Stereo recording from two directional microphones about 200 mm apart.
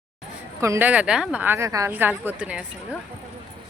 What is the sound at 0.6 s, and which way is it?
A woman's voice, 10° right (ahead or behind).